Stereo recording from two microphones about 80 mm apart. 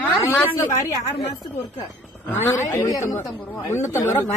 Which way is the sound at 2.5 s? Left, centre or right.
Left.